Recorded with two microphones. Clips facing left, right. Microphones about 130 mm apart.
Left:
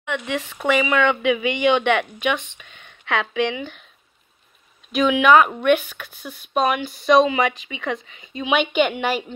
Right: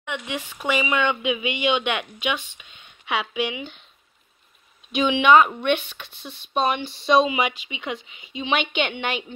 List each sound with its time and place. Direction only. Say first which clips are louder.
0.0 s speech: left 5 dB; 15° right (ahead or behind)
4.9 s a woman's voice: left 1 dB; centre (ahead or behind)
6.5 s a woman's voice: left 2 dB; centre (ahead or behind)
6.8 s speech: left 4 dB; 25° right (ahead or behind)
8.5 s a woman's voice: left 5 dB; 5° left (ahead or behind)